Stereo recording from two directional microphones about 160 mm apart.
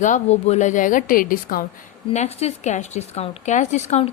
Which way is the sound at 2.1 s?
45° left (ahead or behind).